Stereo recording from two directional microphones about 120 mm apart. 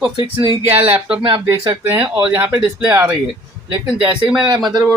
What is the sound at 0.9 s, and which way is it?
Speech, 15° right (ahead or behind).